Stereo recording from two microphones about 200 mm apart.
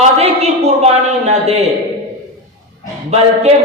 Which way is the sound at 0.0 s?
30° right (ahead or behind).